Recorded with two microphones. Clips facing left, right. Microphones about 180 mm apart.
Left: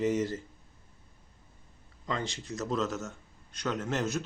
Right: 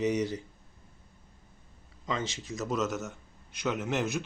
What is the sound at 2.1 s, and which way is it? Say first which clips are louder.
Speech: right 1 dB; 20° right (ahead or behind).